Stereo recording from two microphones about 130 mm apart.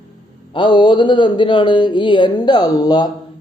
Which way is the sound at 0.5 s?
35° left (ahead or behind).